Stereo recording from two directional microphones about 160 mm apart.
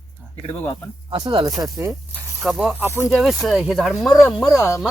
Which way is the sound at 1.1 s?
25° right (ahead or behind).